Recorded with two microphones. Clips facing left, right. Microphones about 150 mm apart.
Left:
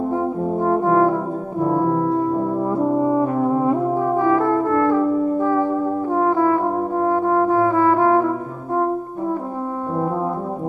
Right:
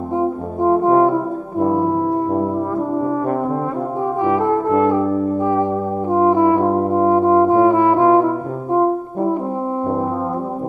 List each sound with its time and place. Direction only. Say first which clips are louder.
0.2 s french horn: right 2 dB; 20° right (ahead or behind)
1.7 s brass instrument: even; 20° right (ahead or behind)
4.2 s brass instrument: right 3 dB; 20° right (ahead or behind)